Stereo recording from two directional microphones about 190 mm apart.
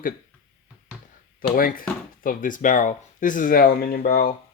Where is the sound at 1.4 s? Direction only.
50° left (ahead or behind).